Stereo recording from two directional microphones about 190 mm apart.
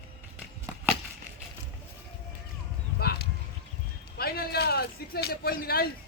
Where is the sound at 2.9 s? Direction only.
55° left (ahead or behind).